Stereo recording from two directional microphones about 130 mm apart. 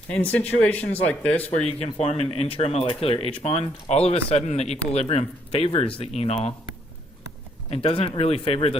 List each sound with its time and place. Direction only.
0.1 s speech: 10° left (ahead or behind)
1.5 s speech: 50° left (ahead or behind)
7.7 s speech: 50° left (ahead or behind)